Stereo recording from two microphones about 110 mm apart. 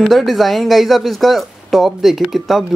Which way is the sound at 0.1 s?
Centre (ahead or behind).